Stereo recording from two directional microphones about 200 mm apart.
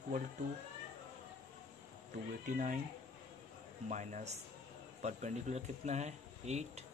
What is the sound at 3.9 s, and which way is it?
Speech, 35° right (ahead or behind).